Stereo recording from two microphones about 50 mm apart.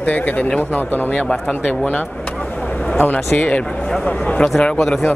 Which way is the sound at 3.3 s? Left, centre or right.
Left.